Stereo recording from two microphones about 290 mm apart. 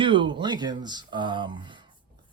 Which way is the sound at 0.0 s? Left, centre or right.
Centre.